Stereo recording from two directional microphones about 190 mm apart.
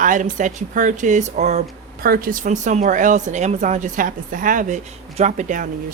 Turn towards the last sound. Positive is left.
turn(degrees=-45)  # may be behind; listen again after turning